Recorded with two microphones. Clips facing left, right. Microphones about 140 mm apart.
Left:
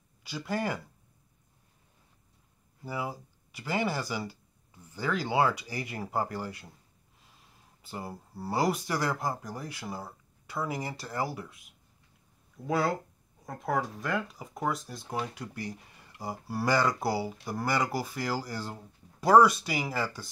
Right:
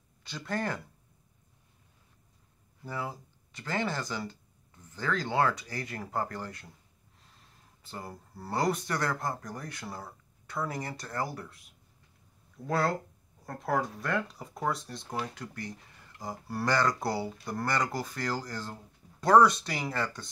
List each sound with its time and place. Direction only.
0.2 s speech: 5° left (ahead or behind)
2.8 s speech: 10° left (ahead or behind)
7.8 s speech: 10° left (ahead or behind)